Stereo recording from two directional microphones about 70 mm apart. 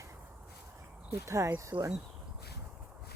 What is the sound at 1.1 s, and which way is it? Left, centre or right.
Speech, right.